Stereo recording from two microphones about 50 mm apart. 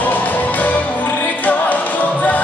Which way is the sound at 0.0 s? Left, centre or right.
Left.